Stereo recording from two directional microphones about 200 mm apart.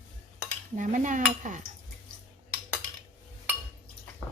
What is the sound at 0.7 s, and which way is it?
Speech, 40° right (ahead or behind).